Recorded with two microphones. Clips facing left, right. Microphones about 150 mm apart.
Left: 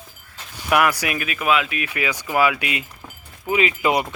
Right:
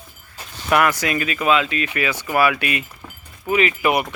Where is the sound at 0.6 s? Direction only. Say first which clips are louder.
Right 1 dB; 10° left (ahead or behind).